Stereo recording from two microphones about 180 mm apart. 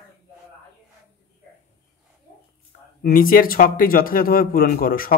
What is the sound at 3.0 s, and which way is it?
Speech, 50° left (ahead or behind).